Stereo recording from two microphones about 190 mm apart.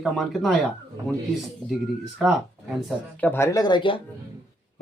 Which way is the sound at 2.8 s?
5° left (ahead or behind).